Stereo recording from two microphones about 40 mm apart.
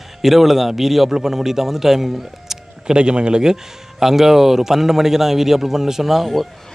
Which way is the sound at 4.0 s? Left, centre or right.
Centre.